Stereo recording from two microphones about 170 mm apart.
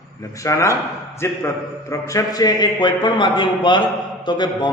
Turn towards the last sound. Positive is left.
turn(degrees=25)  # may be behind; listen again after turning